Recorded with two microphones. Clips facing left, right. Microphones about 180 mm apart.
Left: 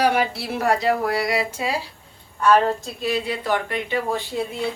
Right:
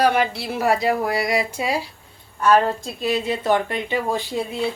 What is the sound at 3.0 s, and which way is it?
A woman's voice, 20° right (ahead or behind).